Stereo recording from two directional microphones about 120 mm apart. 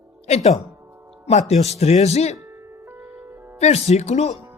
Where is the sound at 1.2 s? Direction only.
65° left (ahead or behind).